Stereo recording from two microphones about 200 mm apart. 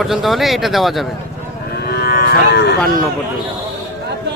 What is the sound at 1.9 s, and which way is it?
Cattle, 55° left (ahead or behind).